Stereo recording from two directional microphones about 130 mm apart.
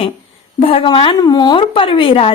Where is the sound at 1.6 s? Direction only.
45° left (ahead or behind).